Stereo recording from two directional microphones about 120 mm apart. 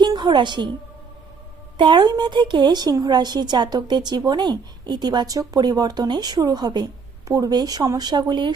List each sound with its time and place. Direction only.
0.0 s a woman's voice: 40° right (ahead or behind)
1.8 s a woman's voice: 40° right (ahead or behind)